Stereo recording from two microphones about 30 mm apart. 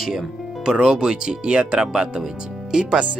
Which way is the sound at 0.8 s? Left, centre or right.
Right.